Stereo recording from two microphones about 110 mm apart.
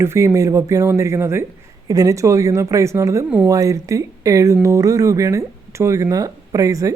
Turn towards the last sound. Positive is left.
turn(degrees=-30)  # may be behind; listen again after turning